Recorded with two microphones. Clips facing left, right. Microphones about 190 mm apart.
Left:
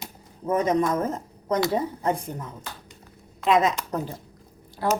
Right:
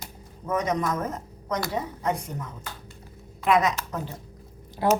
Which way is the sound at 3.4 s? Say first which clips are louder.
Left 1 dB; 25° left (ahead or behind).